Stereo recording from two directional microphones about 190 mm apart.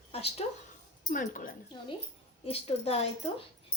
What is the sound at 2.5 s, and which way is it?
Speech, 30° left (ahead or behind).